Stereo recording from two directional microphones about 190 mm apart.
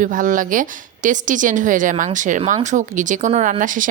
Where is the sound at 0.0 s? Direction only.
45° right (ahead or behind).